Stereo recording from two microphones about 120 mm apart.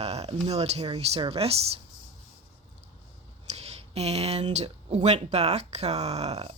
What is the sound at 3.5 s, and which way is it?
Speech, 60° right (ahead or behind).